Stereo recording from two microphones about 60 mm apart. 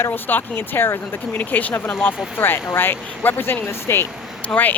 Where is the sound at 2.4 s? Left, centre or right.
Left.